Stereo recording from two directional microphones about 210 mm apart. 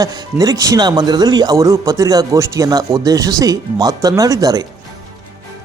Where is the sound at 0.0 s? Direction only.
15° right (ahead or behind).